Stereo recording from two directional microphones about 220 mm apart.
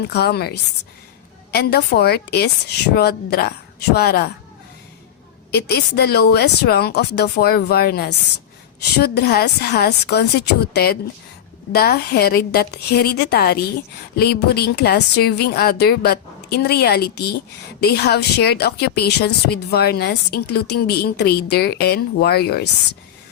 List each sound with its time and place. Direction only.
0.0 s a woman's voice: 50° left (ahead or behind)
5.5 s a woman's voice: 50° left (ahead or behind)